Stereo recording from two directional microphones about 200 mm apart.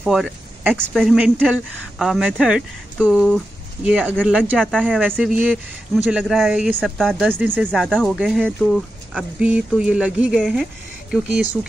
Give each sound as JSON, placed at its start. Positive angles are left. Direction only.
{"t": 0.0, "sound": "speech", "side_deg": 0}
{"t": 7.3, "sound": "speech", "side_deg": -10}
{"t": 7.7, "sound": "speech", "side_deg": 5}